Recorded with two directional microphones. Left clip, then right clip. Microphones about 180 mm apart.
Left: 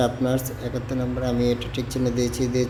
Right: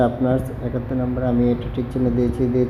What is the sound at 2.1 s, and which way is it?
Speech, 5° right (ahead or behind).